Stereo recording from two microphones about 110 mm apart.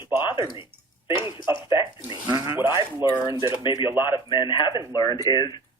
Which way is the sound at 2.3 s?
40° right (ahead or behind).